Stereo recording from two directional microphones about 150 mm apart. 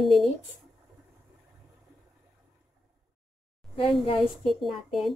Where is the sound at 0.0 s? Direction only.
Centre (ahead or behind).